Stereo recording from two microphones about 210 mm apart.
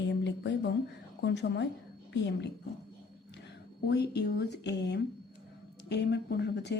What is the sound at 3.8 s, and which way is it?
A woman's voice, 50° left (ahead or behind).